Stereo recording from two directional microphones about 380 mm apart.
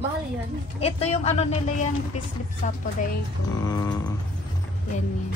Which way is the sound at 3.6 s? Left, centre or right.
Centre.